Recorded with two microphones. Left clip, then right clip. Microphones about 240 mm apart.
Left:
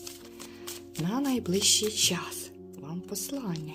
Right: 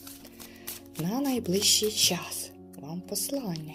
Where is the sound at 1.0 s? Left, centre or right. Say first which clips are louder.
Even; left.